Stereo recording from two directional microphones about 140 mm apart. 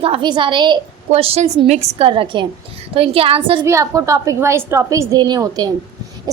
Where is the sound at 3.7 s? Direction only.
20° right (ahead or behind).